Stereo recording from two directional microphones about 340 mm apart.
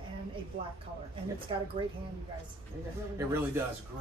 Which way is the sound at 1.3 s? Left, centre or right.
Centre.